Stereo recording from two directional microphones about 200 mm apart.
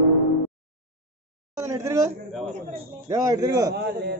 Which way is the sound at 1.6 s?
15° right (ahead or behind).